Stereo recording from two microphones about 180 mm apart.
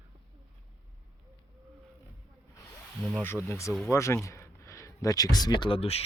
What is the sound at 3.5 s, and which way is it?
Speech, 15° left (ahead or behind).